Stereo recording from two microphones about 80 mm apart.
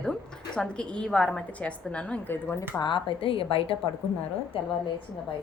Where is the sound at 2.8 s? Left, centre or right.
Left.